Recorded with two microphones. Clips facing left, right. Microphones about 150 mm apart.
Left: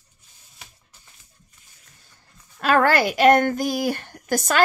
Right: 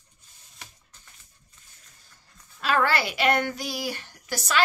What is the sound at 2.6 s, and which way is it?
A woman's voice, 50° left (ahead or behind).